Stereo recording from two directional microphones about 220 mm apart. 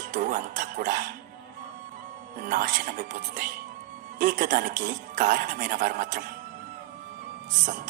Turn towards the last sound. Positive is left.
turn(degrees=-35)  # may be behind; listen again after turning